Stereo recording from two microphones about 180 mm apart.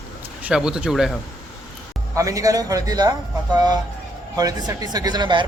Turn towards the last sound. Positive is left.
turn(degrees=-25)  # may be behind; listen again after turning